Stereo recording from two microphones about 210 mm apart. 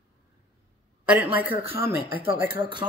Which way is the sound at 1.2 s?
10° right (ahead or behind).